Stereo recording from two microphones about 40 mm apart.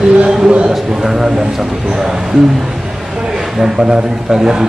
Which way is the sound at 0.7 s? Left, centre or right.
Centre.